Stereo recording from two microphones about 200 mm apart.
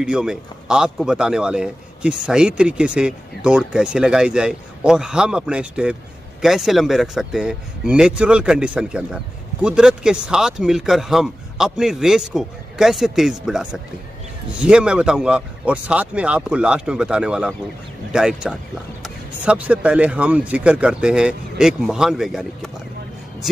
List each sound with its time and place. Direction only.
0.0 s speech: 5° right (ahead or behind)